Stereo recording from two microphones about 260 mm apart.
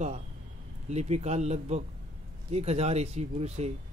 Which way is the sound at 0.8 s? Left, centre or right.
Right.